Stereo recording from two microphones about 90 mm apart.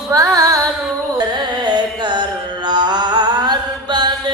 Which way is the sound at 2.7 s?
55° right (ahead or behind).